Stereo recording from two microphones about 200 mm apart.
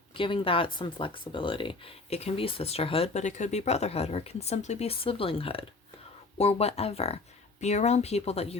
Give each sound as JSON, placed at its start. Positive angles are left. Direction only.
{"t": 0.2, "sound": "speech", "side_deg": 25}